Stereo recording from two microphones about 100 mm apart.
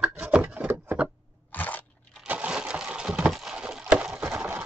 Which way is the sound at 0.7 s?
25° right (ahead or behind).